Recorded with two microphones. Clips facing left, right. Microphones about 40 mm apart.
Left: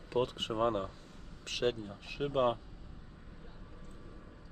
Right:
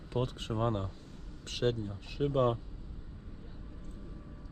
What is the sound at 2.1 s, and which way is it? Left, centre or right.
Speech, left.